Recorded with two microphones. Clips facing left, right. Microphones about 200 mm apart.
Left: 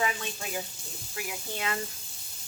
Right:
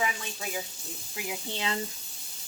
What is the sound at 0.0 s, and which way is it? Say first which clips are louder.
Speech: left 1 dB; 5° right (ahead or behind).